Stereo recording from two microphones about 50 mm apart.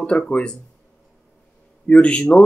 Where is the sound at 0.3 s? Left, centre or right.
Centre.